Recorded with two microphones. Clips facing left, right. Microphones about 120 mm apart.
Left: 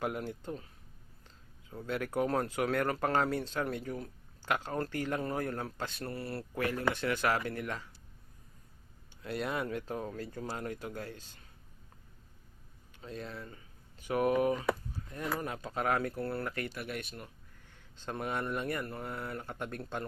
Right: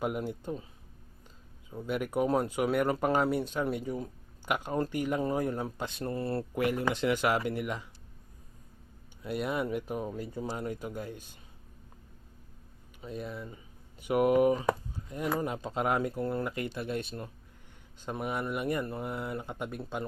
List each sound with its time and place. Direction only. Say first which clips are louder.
0.0 s speech: right 3 dB; 15° right (ahead or behind)
1.7 s speech: right 3 dB; 15° right (ahead or behind)
9.2 s speech: right 3 dB; 5° right (ahead or behind)
13.0 s speech: right 4 dB; 10° right (ahead or behind)
14.0 s speech: right 5 dB; 20° right (ahead or behind)
18.0 s speech: right 2 dB; 10° right (ahead or behind)